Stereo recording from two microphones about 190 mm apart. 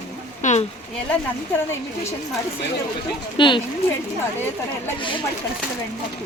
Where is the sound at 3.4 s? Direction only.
25° left (ahead or behind).